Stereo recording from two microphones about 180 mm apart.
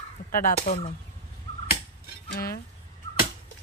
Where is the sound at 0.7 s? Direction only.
45° left (ahead or behind).